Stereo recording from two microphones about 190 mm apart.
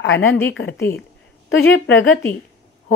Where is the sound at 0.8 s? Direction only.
10° left (ahead or behind).